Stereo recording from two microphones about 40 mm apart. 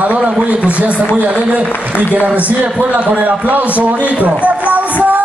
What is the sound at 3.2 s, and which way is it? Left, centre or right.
Speech, right.